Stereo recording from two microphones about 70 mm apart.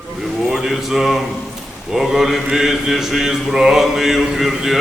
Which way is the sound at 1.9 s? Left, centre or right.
Centre.